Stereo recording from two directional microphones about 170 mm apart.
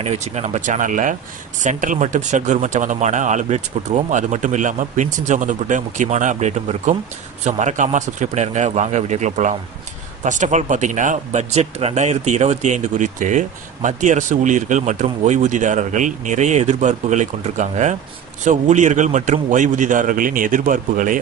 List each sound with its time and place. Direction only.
0.0 s speech: 40° right (ahead or behind)